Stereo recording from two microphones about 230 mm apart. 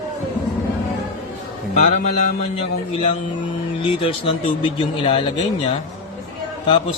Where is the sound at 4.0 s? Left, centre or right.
Left.